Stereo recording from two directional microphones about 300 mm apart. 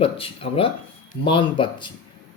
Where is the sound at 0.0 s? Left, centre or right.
Centre.